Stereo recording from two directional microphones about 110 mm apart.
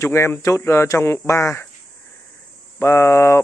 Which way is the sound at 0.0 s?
25° left (ahead or behind).